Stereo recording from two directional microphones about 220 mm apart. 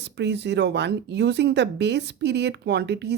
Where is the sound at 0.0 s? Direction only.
50° right (ahead or behind).